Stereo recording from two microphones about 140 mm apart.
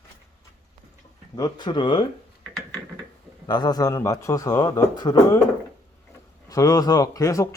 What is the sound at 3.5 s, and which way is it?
Speech, 30° left (ahead or behind).